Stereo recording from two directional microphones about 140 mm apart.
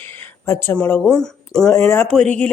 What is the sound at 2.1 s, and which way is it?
Speech, 5° left (ahead or behind).